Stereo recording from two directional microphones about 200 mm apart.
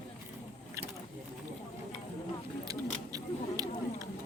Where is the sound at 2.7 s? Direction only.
20° right (ahead or behind).